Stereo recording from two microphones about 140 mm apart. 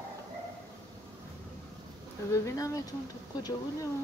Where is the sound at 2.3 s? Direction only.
25° left (ahead or behind).